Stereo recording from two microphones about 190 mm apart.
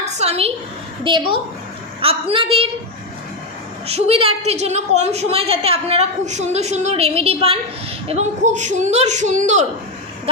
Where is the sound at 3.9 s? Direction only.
30° right (ahead or behind).